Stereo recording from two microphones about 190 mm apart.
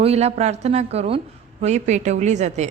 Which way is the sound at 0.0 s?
35° right (ahead or behind).